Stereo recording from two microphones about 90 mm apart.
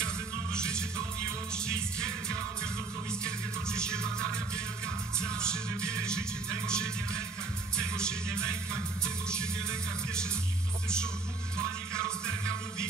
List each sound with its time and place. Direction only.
0.0 s music: 10° left (ahead or behind)
3.6 s music: 10° left (ahead or behind)
11.5 s music: 10° left (ahead or behind)
12.3 s music: 30° right (ahead or behind)